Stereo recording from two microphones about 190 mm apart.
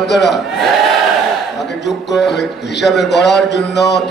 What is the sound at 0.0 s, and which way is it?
Music, 65° left (ahead or behind).